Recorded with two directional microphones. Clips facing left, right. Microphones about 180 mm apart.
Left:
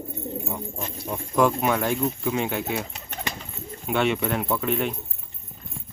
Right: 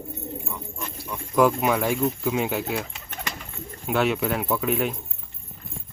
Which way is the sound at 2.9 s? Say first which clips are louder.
Left 2 dB; 30° left (ahead or behind).